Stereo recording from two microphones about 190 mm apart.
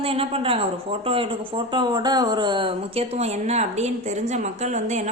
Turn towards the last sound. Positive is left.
turn(degrees=-35)  # may be behind; listen again after turning